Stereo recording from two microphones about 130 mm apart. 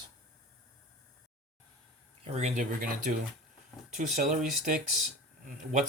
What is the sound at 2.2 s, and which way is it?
Speech, 55° right (ahead or behind).